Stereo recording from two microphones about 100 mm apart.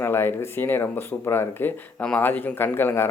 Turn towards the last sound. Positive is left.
turn(degrees=20)  # may be behind; listen again after turning